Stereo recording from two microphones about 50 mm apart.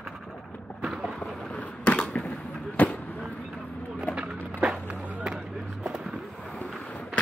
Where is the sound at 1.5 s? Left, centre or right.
Left.